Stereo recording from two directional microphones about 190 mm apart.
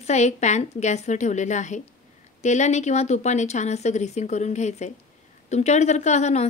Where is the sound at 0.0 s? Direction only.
35° left (ahead or behind).